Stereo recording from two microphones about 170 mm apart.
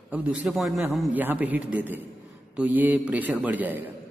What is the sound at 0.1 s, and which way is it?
A man's voice, 10° right (ahead or behind).